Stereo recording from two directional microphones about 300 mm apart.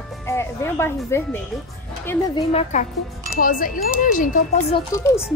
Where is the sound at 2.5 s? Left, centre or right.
Left.